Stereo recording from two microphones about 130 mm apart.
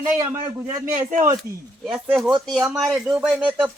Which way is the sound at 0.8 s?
90° right.